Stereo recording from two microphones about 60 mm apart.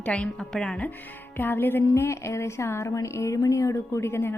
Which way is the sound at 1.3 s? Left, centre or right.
Left.